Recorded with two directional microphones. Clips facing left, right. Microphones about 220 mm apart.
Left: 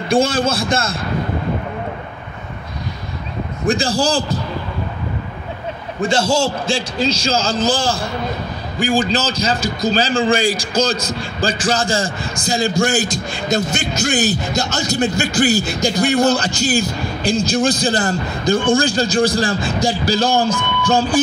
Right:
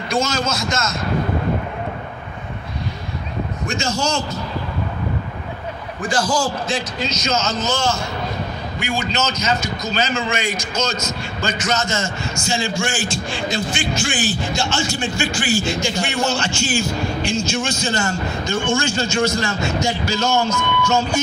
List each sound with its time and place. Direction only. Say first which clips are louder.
0.1 s speech: left 6 dB; 30° left (ahead or behind)
3.6 s speech: left 6 dB; 35° left (ahead or behind)
5.9 s speech: left 4 dB; 25° left (ahead or behind)